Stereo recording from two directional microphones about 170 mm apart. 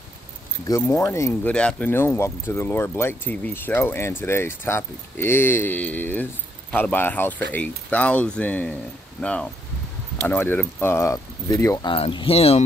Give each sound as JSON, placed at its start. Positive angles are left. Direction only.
{"t": 0.7, "sound": "speech", "side_deg": 15}
{"t": 1.5, "sound": "speech", "side_deg": 5}
{"t": 11.9, "sound": "speech", "side_deg": 30}